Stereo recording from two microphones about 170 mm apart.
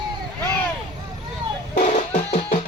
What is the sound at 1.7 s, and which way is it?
Music, 40° left (ahead or behind).